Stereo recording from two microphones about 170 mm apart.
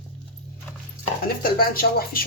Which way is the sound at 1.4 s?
60° left (ahead or behind).